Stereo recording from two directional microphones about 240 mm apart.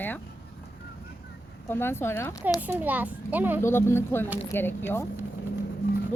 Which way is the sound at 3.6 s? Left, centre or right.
Centre.